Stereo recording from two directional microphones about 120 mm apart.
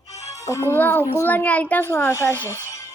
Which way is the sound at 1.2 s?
15° left (ahead or behind).